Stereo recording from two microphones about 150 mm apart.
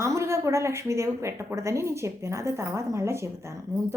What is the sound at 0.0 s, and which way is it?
Speech, 20° right (ahead or behind).